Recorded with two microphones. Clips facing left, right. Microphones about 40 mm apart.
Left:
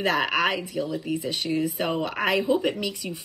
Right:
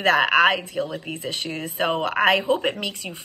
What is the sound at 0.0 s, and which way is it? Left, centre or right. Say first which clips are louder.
A woman's voice: right 6 dB; right.